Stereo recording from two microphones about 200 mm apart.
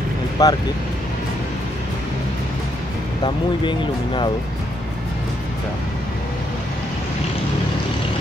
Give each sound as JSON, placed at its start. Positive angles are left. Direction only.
{"t": 0.4, "sound": "speech", "side_deg": 20}
{"t": 3.3, "sound": "speech", "side_deg": 25}